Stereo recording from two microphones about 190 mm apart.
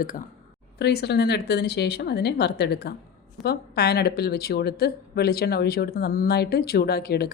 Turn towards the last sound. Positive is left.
turn(degrees=55)  # may be behind; listen again after turning